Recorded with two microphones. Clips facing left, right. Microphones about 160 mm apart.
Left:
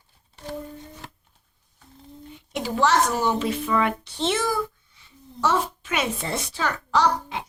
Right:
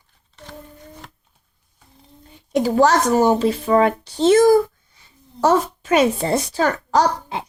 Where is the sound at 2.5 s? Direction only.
40° right (ahead or behind).